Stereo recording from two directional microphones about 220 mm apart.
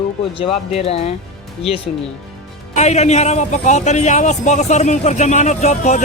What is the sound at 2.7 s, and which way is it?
A man's voice, 30° left (ahead or behind).